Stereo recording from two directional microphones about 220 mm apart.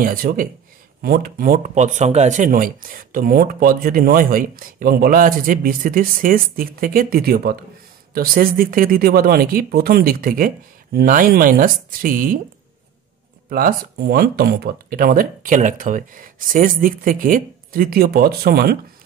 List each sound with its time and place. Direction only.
0.0 s speech: 40° right (ahead or behind)
13.5 s speech: 40° right (ahead or behind)